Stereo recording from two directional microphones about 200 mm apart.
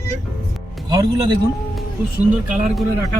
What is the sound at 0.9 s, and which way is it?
Speech, 20° right (ahead or behind).